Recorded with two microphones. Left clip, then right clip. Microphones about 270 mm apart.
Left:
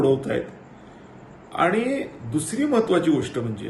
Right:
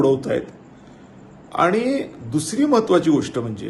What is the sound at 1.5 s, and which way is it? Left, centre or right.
A man's voice, centre.